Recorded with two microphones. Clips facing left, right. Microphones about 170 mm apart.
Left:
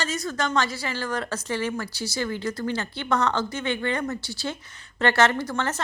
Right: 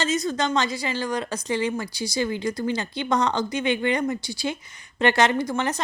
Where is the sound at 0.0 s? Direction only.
20° right (ahead or behind).